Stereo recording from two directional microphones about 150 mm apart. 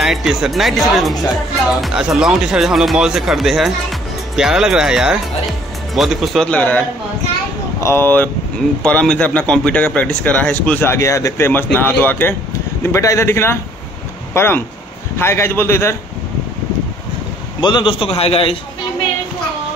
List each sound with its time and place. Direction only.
0.0 s speech: centre (ahead or behind)
7.8 s speech: 15° left (ahead or behind)
17.6 s a man's voice: 30° left (ahead or behind)